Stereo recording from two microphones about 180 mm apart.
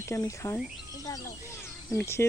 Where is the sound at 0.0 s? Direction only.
15° left (ahead or behind).